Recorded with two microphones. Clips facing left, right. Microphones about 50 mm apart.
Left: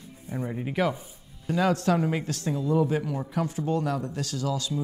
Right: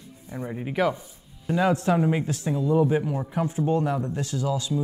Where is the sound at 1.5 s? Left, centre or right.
Centre.